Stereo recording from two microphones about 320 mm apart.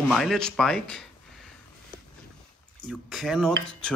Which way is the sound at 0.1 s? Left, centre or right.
Centre.